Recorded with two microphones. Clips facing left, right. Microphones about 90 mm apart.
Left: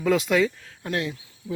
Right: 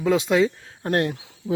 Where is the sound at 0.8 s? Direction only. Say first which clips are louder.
Right 6 dB; 55° right (ahead or behind).